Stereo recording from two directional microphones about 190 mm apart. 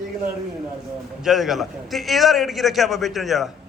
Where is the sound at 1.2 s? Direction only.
Centre (ahead or behind).